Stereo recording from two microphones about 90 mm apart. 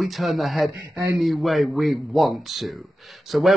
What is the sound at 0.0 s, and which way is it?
Speech, centre (ahead or behind).